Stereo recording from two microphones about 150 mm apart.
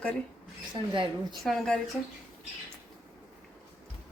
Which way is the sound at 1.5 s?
5° left (ahead or behind).